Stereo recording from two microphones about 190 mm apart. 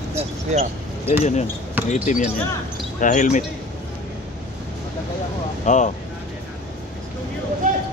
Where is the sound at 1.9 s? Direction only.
40° left (ahead or behind).